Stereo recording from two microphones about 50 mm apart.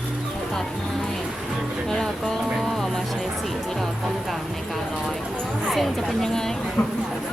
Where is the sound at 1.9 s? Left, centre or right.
Centre.